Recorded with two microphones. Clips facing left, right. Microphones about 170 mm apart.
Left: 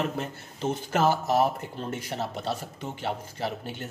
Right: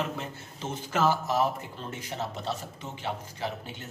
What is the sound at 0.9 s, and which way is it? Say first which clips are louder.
Speech: left 2 dB; 55° left (ahead or behind).